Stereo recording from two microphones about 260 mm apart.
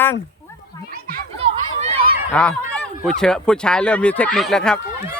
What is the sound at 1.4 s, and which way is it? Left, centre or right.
Chatter, right.